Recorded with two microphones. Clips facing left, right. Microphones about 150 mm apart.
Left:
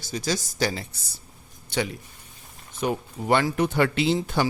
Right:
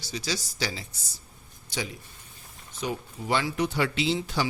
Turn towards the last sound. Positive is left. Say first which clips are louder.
# left 4 dB
turn(degrees=50)  # may be behind; listen again after turning